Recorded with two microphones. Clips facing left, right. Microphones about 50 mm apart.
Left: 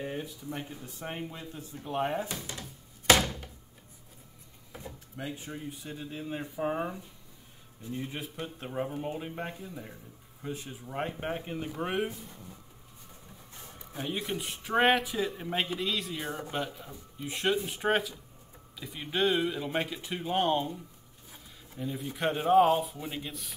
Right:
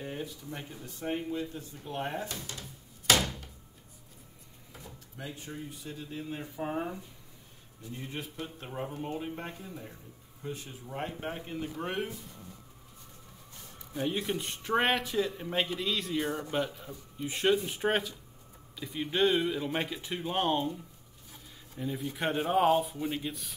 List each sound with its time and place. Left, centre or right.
0.0 s speech: centre
5.1 s speech: centre
8.7 s speech: centre
13.9 s speech: centre
21.7 s speech: centre